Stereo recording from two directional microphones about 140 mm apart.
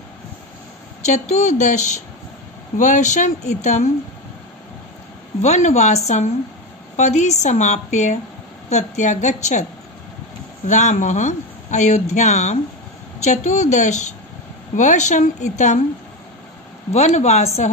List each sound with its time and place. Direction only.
1.0 s speech: 55° left (ahead or behind)
5.4 s speech: 55° left (ahead or behind)
10.7 s speech: 60° left (ahead or behind)
16.9 s speech: 55° left (ahead or behind)